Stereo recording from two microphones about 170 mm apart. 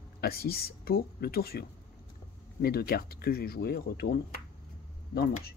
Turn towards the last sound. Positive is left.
turn(degrees=65)  # may be behind; listen again after turning